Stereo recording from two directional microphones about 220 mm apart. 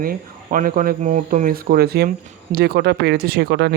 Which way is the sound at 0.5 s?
40° right (ahead or behind).